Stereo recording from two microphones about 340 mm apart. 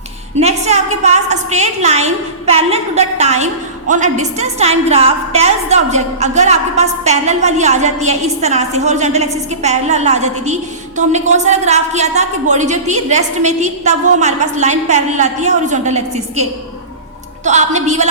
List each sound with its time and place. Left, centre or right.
0.3 s a woman's voice: centre